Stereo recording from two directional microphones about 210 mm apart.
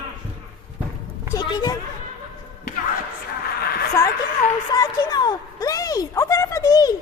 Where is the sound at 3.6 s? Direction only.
45° left (ahead or behind).